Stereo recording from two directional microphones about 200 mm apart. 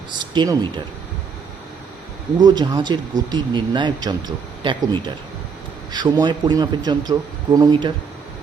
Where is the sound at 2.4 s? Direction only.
20° right (ahead or behind).